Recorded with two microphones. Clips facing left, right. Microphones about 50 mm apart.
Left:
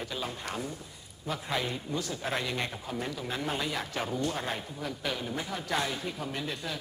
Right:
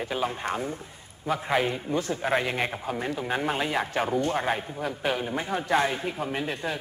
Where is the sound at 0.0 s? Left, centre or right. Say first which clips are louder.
Right 7 dB; right.